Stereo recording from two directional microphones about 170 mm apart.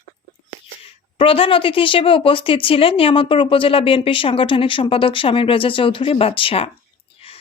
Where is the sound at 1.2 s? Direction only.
30° left (ahead or behind).